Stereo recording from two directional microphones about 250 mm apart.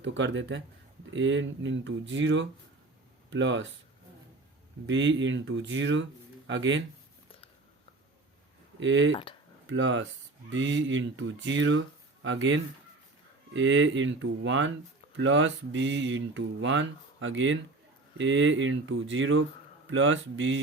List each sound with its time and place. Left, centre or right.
0.0 s speech: right
4.9 s speech: right
8.8 s speech: right